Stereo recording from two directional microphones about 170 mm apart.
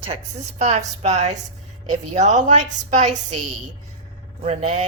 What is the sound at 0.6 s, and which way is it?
A woman's voice, 40° right (ahead or behind).